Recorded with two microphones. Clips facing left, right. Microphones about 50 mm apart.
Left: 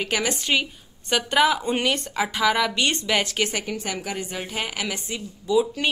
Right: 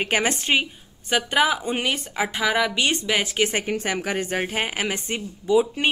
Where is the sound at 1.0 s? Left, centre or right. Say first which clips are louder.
Left 1 dB; centre.